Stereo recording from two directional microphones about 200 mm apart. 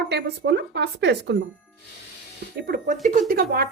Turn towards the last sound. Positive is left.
turn(degrees=-50)  # may be behind; listen again after turning